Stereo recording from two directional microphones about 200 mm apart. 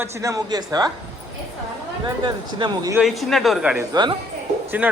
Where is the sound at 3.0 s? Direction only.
Centre (ahead or behind).